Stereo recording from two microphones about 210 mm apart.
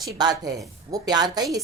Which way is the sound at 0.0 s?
20° right (ahead or behind).